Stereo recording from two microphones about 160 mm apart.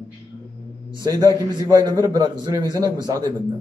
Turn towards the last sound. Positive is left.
turn(degrees=-25)  # may be behind; listen again after turning